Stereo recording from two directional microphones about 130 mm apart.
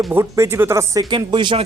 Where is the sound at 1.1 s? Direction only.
35° right (ahead or behind).